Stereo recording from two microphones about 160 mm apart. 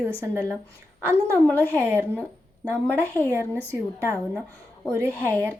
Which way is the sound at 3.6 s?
15° left (ahead or behind).